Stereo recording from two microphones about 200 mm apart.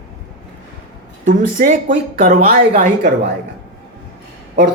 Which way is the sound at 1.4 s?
45° right (ahead or behind).